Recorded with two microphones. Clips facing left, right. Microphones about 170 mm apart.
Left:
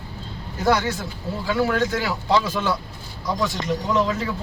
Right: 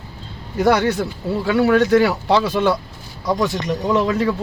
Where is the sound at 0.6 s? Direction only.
65° right (ahead or behind).